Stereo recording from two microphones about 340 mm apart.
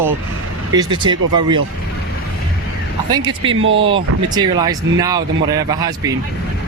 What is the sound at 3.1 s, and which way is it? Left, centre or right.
Speech, centre.